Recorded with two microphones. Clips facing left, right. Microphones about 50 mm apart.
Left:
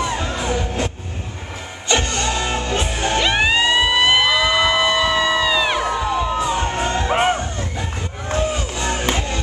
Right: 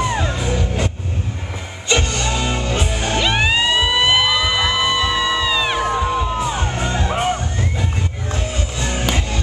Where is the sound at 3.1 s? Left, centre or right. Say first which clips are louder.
Even; centre.